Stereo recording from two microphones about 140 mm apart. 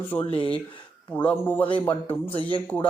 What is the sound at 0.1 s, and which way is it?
Speech, 15° left (ahead or behind).